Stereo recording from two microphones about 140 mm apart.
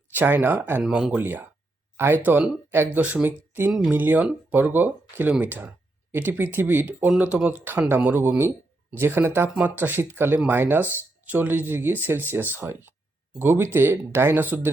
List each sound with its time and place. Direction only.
0.1 s speech: 15° right (ahead or behind)
0.8 s speech: 5° right (ahead or behind)
1.2 s speech: 15° right (ahead or behind)